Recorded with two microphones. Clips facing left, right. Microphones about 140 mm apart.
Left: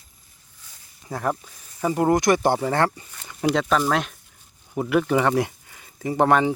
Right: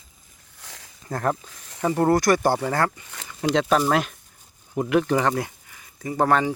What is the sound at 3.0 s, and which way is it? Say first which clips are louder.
Speech: right 4 dB; 90° right.